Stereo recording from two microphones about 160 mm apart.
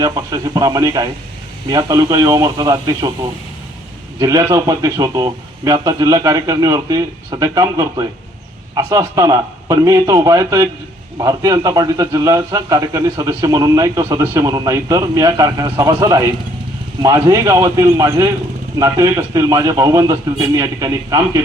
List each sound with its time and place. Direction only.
0.0 s a man's voice: 25° right (ahead or behind)
4.2 s a man's voice: 20° right (ahead or behind)
17.2 s a man's voice: 20° right (ahead or behind)